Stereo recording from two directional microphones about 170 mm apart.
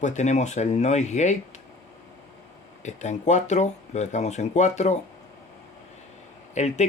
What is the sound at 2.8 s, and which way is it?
Speech, 45° left (ahead or behind).